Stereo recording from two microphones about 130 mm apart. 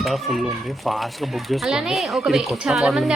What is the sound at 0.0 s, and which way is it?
A child's voice, centre (ahead or behind).